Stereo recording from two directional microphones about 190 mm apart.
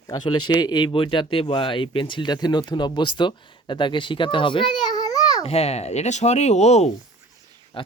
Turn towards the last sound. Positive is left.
turn(degrees=25)  # may be behind; listen again after turning